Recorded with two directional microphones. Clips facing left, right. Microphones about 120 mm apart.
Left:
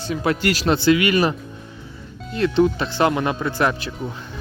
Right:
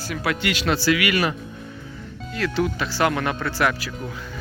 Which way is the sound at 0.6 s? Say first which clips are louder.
Left 4 dB; 25° left (ahead or behind).